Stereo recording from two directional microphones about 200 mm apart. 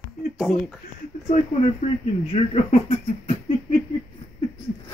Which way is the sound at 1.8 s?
35° left (ahead or behind).